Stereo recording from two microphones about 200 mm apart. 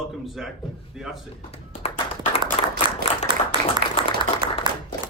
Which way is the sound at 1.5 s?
30° left (ahead or behind).